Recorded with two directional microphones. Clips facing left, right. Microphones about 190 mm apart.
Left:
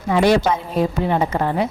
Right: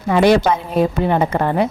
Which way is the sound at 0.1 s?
60° right (ahead or behind).